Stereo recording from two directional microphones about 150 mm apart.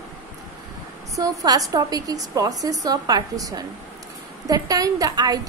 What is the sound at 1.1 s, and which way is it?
A woman's voice, 25° right (ahead or behind).